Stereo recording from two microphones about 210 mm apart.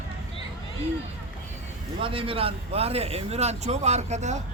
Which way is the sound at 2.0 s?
25° right (ahead or behind).